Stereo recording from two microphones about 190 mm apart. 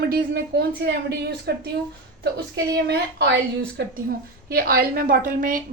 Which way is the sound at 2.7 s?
60° right (ahead or behind).